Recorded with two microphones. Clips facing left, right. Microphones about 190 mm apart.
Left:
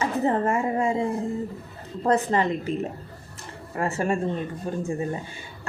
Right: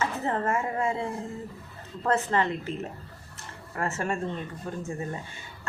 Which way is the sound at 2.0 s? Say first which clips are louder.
Left 4 dB; 15° left (ahead or behind).